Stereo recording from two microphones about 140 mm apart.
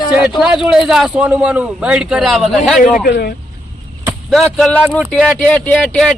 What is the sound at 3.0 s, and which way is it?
Speech, 90° left.